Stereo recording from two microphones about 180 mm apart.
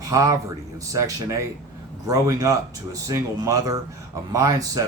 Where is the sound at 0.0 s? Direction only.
20° right (ahead or behind).